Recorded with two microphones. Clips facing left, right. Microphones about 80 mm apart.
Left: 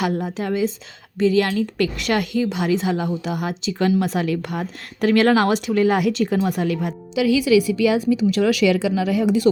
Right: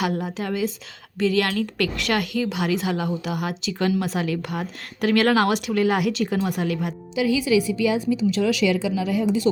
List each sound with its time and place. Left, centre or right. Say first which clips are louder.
0.3 s a woman's voice: left 3 dB; left
7.2 s a woman's voice: left 4 dB; left